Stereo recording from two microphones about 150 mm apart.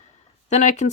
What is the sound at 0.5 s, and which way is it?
Speech, 50° left (ahead or behind).